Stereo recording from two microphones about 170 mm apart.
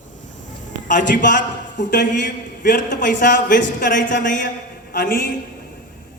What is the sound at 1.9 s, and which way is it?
Speech, 90° left.